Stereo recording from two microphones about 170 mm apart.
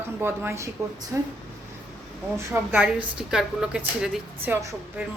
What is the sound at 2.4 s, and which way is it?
A woman's voice, 10° right (ahead or behind).